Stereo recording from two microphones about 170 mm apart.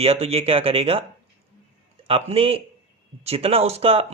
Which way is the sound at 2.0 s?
35° right (ahead or behind).